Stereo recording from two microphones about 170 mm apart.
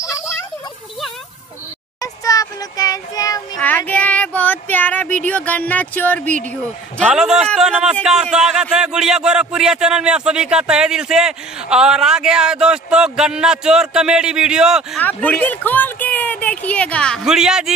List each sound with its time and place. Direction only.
0.0 s a sound: 20° left (ahead or behind)
2.0 s child singing: 20° left (ahead or behind)
3.6 s speech: 10° left (ahead or behind)
7.1 s speech: 5° right (ahead or behind)
15.0 s speech: 10° left (ahead or behind)